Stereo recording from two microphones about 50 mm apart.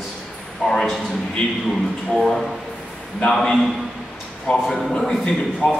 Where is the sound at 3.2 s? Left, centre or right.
Centre.